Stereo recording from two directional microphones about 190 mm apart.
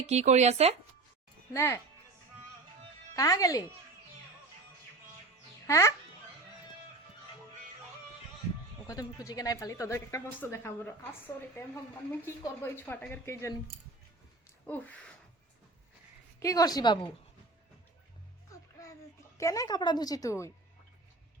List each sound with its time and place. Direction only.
0.0 s speech: 35° right (ahead or behind)
1.5 s a woman's voice: 15° left (ahead or behind)
3.2 s a woman's voice: 20° left (ahead or behind)
5.6 s a child's voice: 15° left (ahead or behind)
8.9 s a woman's voice: 20° left (ahead or behind)
12.2 s a woman's voice: 15° left (ahead or behind)
14.7 s a woman's voice: 5° left (ahead or behind)
16.4 s speech: 20° left (ahead or behind)
18.5 s music: 15° left (ahead or behind)
19.4 s speech: 15° left (ahead or behind)